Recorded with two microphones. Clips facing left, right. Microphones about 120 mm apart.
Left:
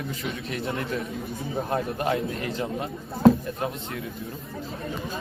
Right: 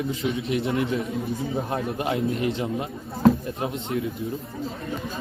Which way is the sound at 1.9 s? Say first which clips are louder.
Right 1 dB; 20° right (ahead or behind).